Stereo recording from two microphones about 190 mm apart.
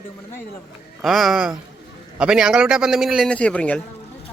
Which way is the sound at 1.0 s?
Centre (ahead or behind).